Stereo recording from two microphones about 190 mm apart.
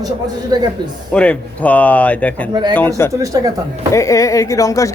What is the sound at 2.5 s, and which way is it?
Speech, 20° right (ahead or behind).